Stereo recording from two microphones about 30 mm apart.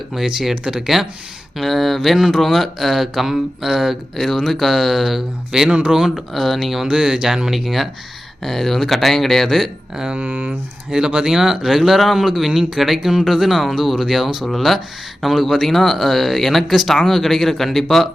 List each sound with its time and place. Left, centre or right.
0.3 s speech: centre
0.5 s speech: right
0.8 s speech: centre
1.5 s speech: centre
4.2 s speech: centre
5.5 s speech: right
5.9 s speech: centre
6.9 s speech: centre
8.4 s speech: centre
10.9 s speech: right
11.8 s speech: centre